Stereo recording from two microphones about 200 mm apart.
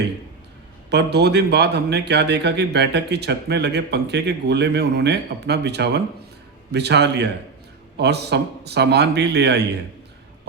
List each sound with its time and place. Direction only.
0.9 s speech: 55° right (ahead or behind)